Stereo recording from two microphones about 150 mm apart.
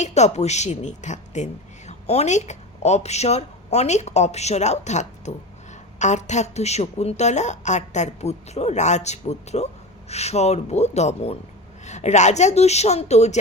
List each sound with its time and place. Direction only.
0.0 s a woman's voice: 50° left (ahead or behind)